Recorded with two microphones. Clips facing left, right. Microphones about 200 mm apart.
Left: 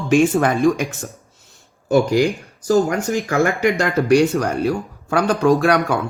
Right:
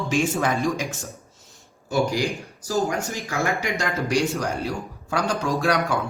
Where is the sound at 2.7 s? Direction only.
60° left (ahead or behind).